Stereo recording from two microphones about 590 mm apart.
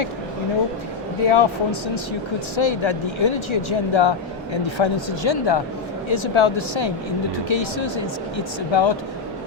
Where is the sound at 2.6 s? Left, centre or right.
Left.